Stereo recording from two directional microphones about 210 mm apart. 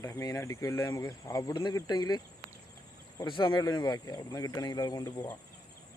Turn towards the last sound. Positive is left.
turn(degrees=20)  # may be behind; listen again after turning